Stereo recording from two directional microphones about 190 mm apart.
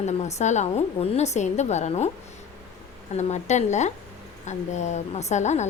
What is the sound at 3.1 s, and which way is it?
A woman's voice, 35° left (ahead or behind).